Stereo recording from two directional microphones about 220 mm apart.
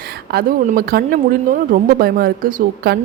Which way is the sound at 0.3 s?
45° right (ahead or behind).